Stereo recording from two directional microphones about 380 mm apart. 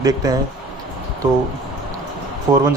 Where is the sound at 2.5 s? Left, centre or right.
Centre.